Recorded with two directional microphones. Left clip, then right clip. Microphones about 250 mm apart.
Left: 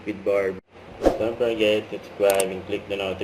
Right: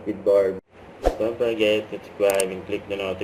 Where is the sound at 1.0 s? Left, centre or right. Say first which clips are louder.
Left 1 dB; centre.